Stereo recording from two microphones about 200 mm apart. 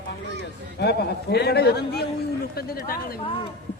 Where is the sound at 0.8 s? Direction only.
55° left (ahead or behind).